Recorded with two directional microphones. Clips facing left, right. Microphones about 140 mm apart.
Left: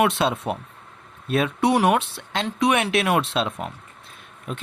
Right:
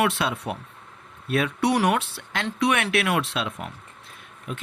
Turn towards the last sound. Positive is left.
turn(degrees=35)  # may be behind; listen again after turning